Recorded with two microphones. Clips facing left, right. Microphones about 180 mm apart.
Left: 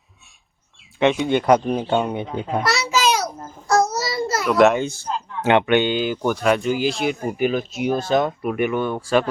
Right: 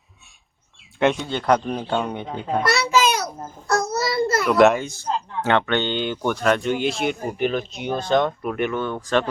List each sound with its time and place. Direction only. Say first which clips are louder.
0.9 s speech: left 1 dB; centre (ahead or behind)
1.2 s speech: left 4 dB; 15° left (ahead or behind)
2.6 s a sound: right 2 dB; 55° right (ahead or behind)
4.4 s a child's voice: left 1 dB; centre (ahead or behind)
4.8 s a man's voice: left 6 dB; 30° left (ahead or behind)
5.4 s speech: left 5 dB; 15° left (ahead or behind)